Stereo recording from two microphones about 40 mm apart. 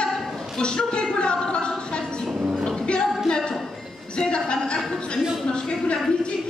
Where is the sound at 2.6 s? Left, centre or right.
Left.